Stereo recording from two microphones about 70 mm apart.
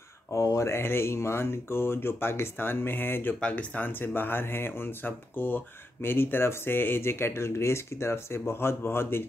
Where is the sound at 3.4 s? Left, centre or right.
Centre.